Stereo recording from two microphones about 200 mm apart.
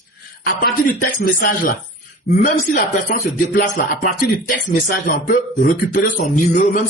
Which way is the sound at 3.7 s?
45° left (ahead or behind).